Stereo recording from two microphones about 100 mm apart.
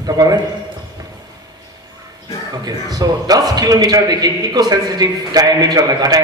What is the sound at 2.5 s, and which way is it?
A man's voice, 40° right (ahead or behind).